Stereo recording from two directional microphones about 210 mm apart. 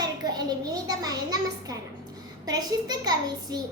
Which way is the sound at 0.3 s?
20° right (ahead or behind).